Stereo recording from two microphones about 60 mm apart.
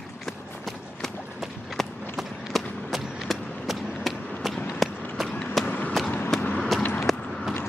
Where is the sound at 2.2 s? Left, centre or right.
Centre.